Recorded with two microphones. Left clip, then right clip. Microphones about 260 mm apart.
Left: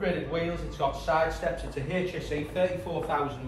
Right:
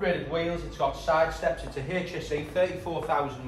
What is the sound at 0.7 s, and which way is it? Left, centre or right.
Speech, right.